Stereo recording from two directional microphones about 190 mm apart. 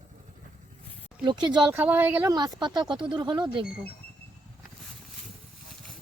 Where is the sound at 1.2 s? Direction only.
25° right (ahead or behind).